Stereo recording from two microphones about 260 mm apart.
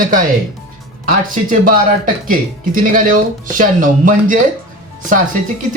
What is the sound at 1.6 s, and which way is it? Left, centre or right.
Speech, right.